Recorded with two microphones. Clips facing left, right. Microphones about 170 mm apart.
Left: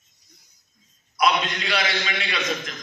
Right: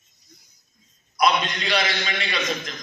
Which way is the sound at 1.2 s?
Centre (ahead or behind).